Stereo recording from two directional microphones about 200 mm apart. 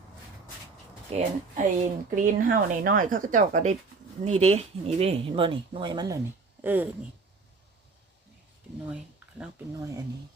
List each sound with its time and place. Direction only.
1.1 s speech: 35° right (ahead or behind)
6.6 s speech: 10° right (ahead or behind)